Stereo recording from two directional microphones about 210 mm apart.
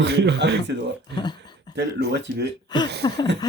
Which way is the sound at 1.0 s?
20° left (ahead or behind).